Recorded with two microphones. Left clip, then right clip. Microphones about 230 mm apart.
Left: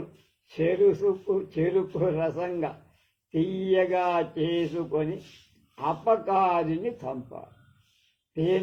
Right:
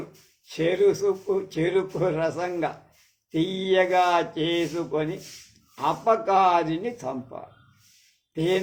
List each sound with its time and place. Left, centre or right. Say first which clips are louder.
0.6 s speech: right 1 dB; right